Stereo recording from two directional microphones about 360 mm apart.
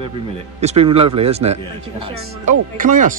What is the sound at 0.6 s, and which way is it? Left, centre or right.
A man's voice, centre.